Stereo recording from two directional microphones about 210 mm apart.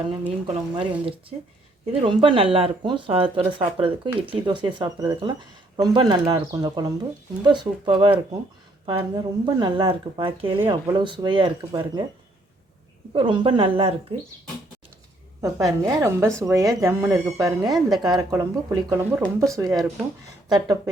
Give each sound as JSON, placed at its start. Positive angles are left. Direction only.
{"t": 0.4, "sound": "speech", "side_deg": -25}
{"t": 13.1, "sound": "speech", "side_deg": -25}
{"t": 15.4, "sound": "speech", "side_deg": -15}
{"t": 17.7, "sound": "speech", "side_deg": 0}
{"t": 18.0, "sound": "speech", "side_deg": -15}